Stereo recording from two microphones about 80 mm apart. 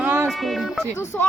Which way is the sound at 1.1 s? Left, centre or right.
Left.